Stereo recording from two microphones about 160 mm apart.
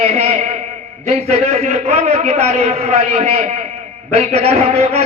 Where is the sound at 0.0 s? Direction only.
40° right (ahead or behind).